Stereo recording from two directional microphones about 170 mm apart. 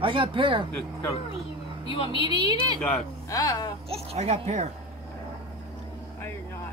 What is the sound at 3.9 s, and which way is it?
Speech, 35° right (ahead or behind).